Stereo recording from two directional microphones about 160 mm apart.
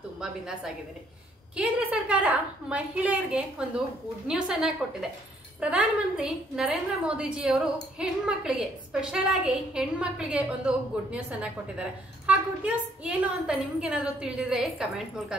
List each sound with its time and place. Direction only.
0.2 s a woman's voice: 5° right (ahead or behind)